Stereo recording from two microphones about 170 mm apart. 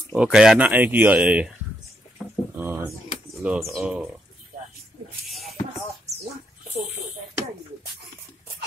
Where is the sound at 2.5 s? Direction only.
10° right (ahead or behind).